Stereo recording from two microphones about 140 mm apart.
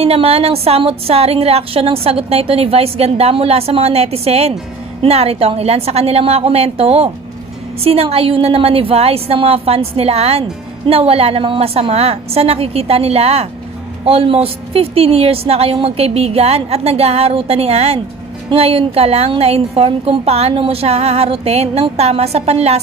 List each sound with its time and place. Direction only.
0.0 s a woman's voice: 45° right (ahead or behind)